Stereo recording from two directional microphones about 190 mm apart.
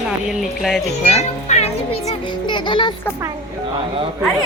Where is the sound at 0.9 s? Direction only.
35° left (ahead or behind).